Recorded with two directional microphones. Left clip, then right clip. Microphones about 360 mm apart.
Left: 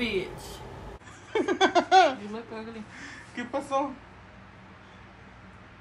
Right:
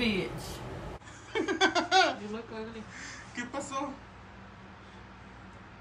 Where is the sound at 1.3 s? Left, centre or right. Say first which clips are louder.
Left 4 dB; centre.